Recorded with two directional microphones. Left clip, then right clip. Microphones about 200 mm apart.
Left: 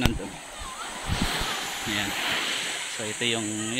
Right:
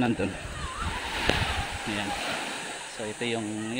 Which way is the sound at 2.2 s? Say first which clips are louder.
Left 4 dB; 50° right (ahead or behind).